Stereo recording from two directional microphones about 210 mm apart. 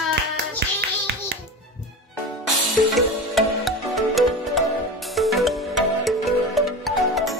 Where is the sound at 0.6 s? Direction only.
55° right (ahead or behind).